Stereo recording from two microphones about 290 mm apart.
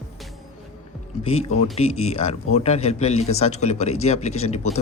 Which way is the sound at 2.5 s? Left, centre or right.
Left.